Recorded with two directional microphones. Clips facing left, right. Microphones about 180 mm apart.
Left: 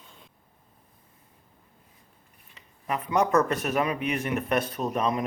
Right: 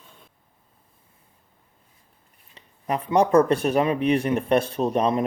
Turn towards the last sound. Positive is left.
turn(degrees=-30)  # may be behind; listen again after turning